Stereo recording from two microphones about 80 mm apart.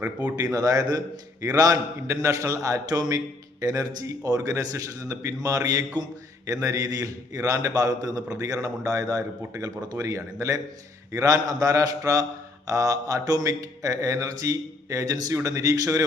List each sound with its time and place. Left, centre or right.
0.0 s speech: centre
0.5 s a man's voice: right